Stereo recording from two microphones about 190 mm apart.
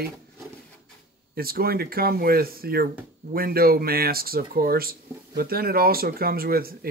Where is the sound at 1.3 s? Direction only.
50° right (ahead or behind).